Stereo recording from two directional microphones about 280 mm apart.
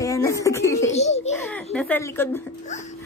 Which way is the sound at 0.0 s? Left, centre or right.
Centre.